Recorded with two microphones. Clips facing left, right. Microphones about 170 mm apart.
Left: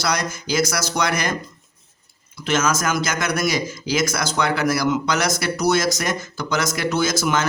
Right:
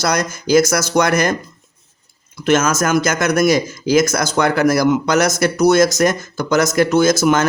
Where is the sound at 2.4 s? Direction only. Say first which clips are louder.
Right 6 dB; 50° right (ahead or behind).